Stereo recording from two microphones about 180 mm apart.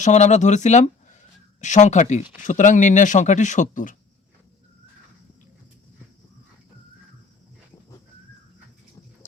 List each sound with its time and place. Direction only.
0.0 s speech: 40° left (ahead or behind)